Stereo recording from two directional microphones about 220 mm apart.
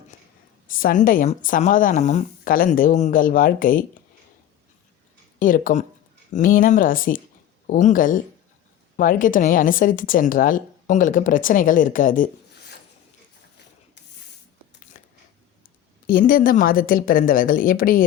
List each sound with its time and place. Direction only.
0.7 s a woman's voice: 40° left (ahead or behind)
5.4 s a woman's voice: 40° left (ahead or behind)
14.9 s biting: 40° left (ahead or behind)
16.0 s a woman's voice: 40° left (ahead or behind)